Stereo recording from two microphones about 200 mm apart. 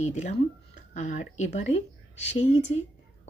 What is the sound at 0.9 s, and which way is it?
Speech, 35° left (ahead or behind).